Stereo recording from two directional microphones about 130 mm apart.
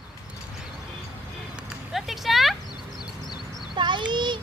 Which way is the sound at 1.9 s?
Centre (ahead or behind).